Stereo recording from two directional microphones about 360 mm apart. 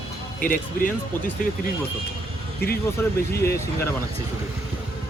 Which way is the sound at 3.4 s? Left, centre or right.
Centre.